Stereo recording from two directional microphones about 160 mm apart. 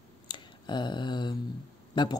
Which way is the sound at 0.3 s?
30° left (ahead or behind).